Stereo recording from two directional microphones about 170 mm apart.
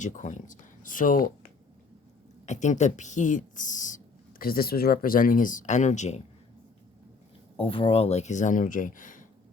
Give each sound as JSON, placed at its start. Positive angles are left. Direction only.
{"t": 0.0, "sound": "speech", "side_deg": 45}
{"t": 2.5, "sound": "speech", "side_deg": 45}
{"t": 7.5, "sound": "speech", "side_deg": 30}